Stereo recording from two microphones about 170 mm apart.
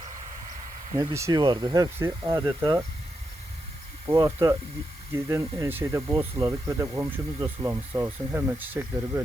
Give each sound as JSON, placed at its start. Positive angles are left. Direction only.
{"t": 0.9, "sound": "speech", "side_deg": -20}
{"t": 4.1, "sound": "speech", "side_deg": -20}